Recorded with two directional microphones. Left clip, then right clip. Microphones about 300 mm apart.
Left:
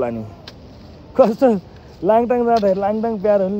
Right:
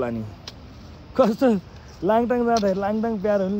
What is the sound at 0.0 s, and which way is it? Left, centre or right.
Speech, centre.